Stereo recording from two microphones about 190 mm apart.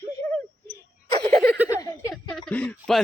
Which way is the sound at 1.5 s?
10° right (ahead or behind).